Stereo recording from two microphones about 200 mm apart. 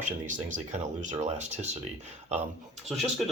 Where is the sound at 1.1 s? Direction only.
35° right (ahead or behind).